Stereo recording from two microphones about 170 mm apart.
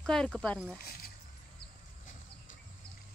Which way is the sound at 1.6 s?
50° left (ahead or behind).